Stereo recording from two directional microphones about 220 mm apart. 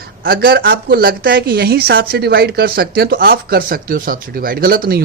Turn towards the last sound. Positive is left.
turn(degrees=-40)  # may be behind; listen again after turning